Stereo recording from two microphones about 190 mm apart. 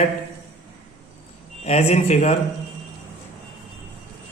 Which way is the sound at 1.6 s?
35° left (ahead or behind).